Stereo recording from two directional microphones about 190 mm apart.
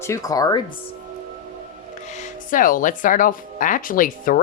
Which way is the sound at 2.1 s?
40° left (ahead or behind).